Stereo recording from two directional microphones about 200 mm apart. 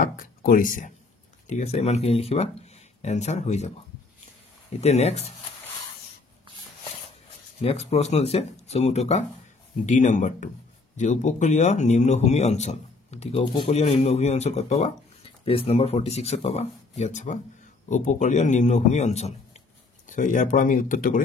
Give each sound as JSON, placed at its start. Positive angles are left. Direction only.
{"t": 0.0, "sound": "a man's voice", "side_deg": 45}
{"t": 4.7, "sound": "a man's voice", "side_deg": 35}
{"t": 7.6, "sound": "a man's voice", "side_deg": 30}